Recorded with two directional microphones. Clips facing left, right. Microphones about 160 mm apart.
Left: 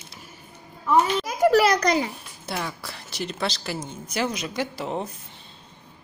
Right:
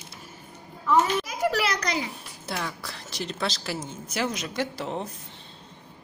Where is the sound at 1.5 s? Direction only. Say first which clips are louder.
Left 8 dB; 45° left (ahead or behind).